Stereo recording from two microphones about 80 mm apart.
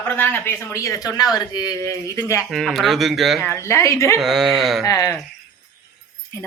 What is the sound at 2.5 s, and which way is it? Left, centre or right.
Speech, centre.